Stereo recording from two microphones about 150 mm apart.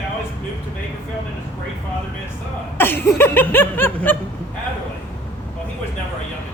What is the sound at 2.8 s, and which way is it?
Chuckle, 15° left (ahead or behind).